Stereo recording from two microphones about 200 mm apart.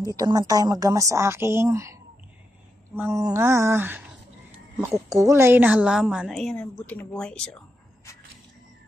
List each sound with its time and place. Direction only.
0.0 s a woman's voice: 15° right (ahead or behind)
3.0 s a woman's voice: 15° right (ahead or behind); by 7.6 s 5° left (ahead or behind)